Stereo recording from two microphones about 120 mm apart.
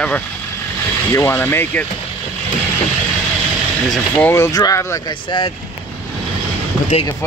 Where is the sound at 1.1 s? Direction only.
20° left (ahead or behind).